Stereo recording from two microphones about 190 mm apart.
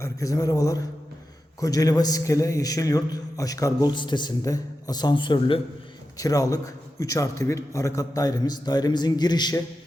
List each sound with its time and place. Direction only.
0.0 s a man's voice: 15° left (ahead or behind)